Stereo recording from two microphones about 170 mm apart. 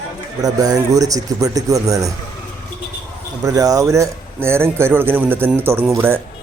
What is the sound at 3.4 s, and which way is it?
A man's voice, 20° right (ahead or behind).